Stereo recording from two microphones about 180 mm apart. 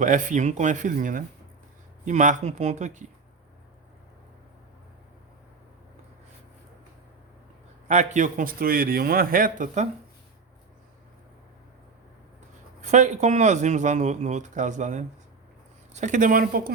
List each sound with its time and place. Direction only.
0.0 s a man's voice: 45° right (ahead or behind)
7.9 s a man's voice: 40° right (ahead or behind)
12.8 s a man's voice: 40° right (ahead or behind)